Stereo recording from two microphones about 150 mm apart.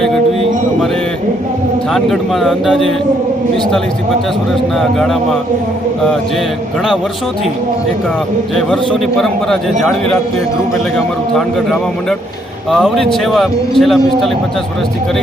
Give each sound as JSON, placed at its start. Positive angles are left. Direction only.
{"t": 1.9, "sound": "a man's voice", "side_deg": 0}
{"t": 4.8, "sound": "a man's voice", "side_deg": 0}
{"t": 8.5, "sound": "a man's voice", "side_deg": 5}